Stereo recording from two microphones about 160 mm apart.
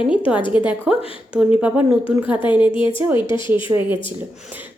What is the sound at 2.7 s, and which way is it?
Speech, 30° left (ahead or behind).